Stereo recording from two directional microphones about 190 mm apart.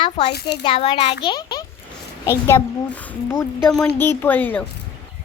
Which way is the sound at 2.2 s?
10° left (ahead or behind).